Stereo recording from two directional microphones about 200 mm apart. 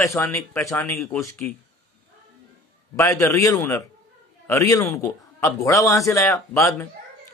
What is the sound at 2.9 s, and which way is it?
A man's voice, 15° left (ahead or behind).